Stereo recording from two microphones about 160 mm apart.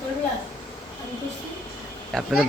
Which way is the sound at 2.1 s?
Centre (ahead or behind).